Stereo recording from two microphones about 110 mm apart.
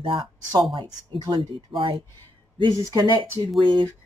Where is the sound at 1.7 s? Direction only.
50° right (ahead or behind).